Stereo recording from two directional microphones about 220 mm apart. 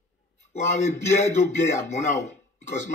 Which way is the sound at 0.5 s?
30° left (ahead or behind).